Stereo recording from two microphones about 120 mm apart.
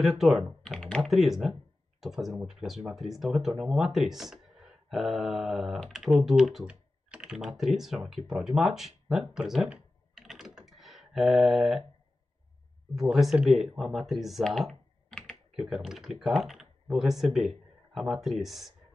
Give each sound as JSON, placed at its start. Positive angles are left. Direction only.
{"t": 0.0, "sound": "speech", "side_deg": 0}
{"t": 9.3, "sound": "computer keyboard", "side_deg": -5}
{"t": 12.9, "sound": "speech", "side_deg": 0}